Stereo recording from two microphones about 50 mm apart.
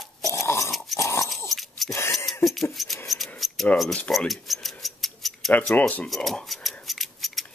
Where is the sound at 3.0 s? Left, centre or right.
Centre.